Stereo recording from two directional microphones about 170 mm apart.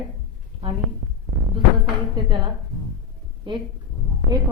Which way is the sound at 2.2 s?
25° right (ahead or behind).